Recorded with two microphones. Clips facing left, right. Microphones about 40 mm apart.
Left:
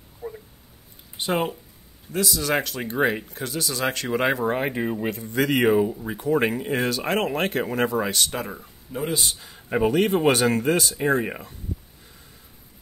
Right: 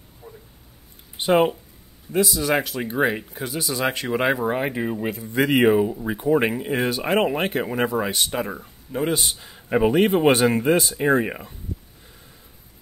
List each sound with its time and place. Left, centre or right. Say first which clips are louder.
0.2 s cat: left 8 dB; centre
1.1 s a man's voice: right 6 dB; centre